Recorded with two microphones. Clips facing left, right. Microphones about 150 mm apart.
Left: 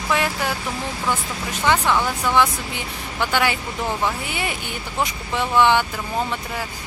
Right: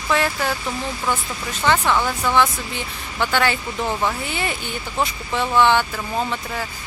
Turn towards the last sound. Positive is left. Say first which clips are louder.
# right 1 dB
turn(degrees=15)  # may be behind; listen again after turning